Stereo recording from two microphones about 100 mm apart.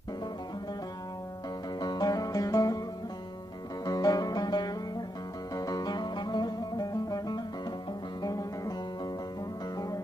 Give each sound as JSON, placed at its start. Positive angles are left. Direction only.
{"t": 1.8, "sound": "music", "side_deg": 45}
{"t": 3.8, "sound": "music", "side_deg": 40}